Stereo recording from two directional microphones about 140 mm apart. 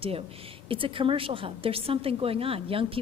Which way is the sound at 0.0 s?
45° right (ahead or behind).